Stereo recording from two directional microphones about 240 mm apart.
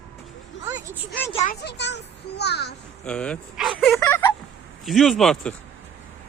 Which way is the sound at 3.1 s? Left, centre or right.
Centre.